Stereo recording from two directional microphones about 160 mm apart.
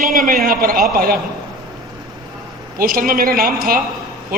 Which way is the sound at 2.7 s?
60° right (ahead or behind).